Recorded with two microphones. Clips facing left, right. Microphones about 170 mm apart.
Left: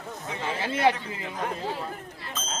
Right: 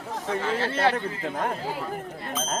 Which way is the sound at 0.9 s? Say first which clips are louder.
Right 6 dB; 55° right (ahead or behind).